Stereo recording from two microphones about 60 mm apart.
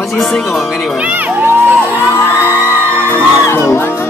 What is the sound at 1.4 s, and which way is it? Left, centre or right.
Crowd, right.